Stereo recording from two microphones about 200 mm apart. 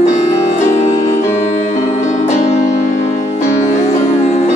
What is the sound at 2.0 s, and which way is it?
Music, 35° left (ahead or behind).